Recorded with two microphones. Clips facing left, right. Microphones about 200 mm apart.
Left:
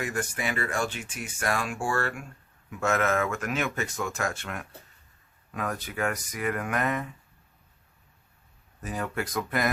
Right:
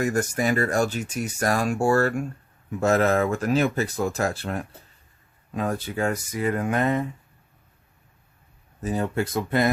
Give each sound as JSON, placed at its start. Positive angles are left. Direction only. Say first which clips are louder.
{"t": 0.0, "sound": "speech", "louder": "right 8 dB", "side_deg": -40}
{"t": 8.8, "sound": "speech", "louder": "right 7 dB", "side_deg": -25}